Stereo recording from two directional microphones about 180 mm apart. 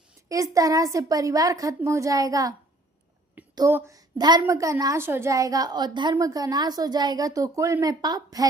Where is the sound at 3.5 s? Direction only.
20° right (ahead or behind).